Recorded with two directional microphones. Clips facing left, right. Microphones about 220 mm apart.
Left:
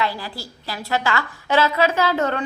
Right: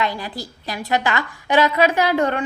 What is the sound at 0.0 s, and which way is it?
A woman's voice, 20° right (ahead or behind).